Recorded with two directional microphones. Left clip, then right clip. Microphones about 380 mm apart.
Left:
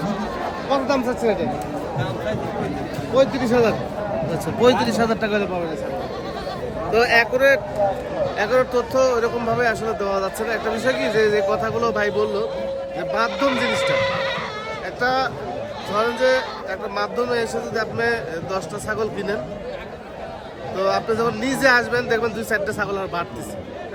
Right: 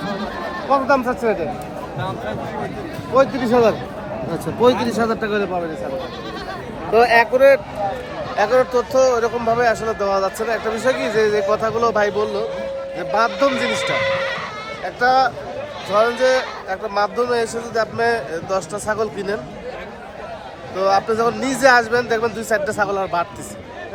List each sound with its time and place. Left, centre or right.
0.7 s speech: centre
3.2 s speech: centre
6.9 s a man's voice: centre
13.7 s speech: left
15.0 s speech: centre
20.7 s speech: centre